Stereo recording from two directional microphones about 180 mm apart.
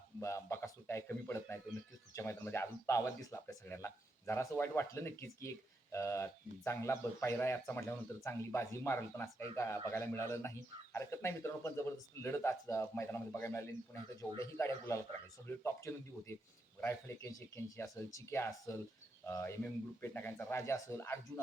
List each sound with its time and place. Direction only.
0.2 s speech: 15° left (ahead or behind)